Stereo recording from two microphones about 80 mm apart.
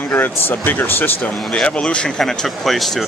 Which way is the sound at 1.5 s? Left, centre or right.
Centre.